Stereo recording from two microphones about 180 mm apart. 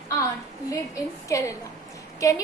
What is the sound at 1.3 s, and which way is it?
A child's voice, 15° left (ahead or behind).